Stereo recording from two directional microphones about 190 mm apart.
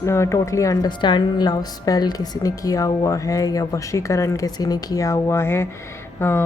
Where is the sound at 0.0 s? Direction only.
15° left (ahead or behind).